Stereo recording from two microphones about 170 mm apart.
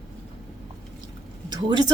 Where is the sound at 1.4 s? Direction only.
25° right (ahead or behind).